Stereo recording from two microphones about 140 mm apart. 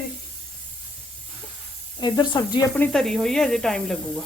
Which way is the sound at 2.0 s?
35° left (ahead or behind).